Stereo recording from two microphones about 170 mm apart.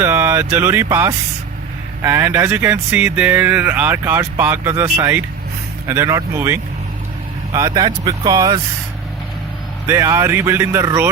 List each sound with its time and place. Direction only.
0.0 s speech: 15° right (ahead or behind)
9.8 s speech: 15° right (ahead or behind)